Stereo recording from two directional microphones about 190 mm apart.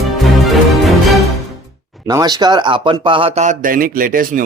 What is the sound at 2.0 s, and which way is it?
A man's voice, 20° right (ahead or behind).